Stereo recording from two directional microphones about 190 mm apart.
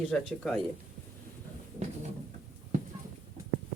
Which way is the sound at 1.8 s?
35° right (ahead or behind).